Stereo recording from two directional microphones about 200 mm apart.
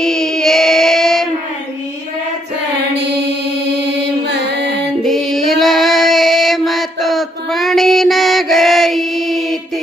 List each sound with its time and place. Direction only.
0.0 s child singing: centre (ahead or behind)
4.3 s music: 55° right (ahead or behind)
5.0 s female singing: centre (ahead or behind)